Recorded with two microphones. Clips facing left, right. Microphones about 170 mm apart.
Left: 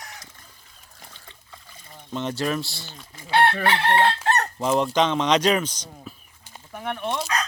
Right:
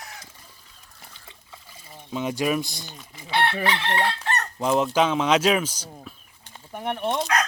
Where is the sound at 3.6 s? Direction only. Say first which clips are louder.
Left 4 dB; 55° left (ahead or behind).